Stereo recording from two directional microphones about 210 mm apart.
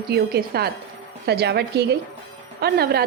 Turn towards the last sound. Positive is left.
turn(degrees=-50)  # may be behind; listen again after turning